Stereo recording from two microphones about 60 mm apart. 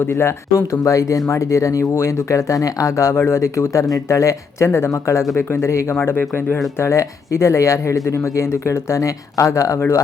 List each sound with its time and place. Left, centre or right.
0.0 s speech: left
3.2 s speech: left
5.4 s speech: left
6.0 s speech: left
6.7 s speech: left